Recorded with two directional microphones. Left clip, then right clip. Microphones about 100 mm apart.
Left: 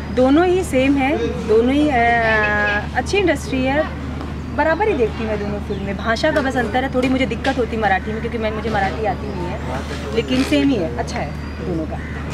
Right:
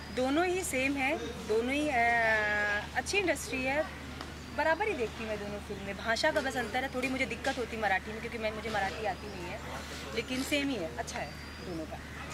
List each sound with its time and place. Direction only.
0.1 s speech: 5° right (ahead or behind)
10.1 s speech: 5° right (ahead or behind)